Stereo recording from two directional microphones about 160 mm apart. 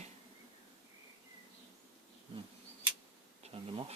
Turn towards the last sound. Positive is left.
turn(degrees=-40)  # may be behind; listen again after turning